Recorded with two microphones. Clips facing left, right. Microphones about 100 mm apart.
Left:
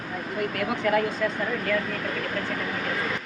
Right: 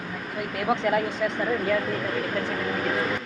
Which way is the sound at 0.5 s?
20° right (ahead or behind).